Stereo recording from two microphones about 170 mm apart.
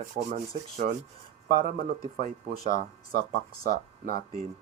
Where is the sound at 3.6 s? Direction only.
60° right (ahead or behind).